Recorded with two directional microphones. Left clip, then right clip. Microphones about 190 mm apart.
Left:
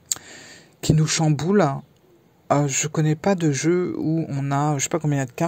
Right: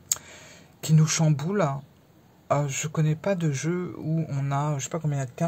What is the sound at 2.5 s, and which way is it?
Speech, 30° left (ahead or behind).